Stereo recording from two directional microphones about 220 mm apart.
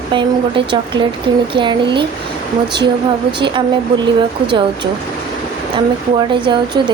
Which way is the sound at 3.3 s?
20° right (ahead or behind).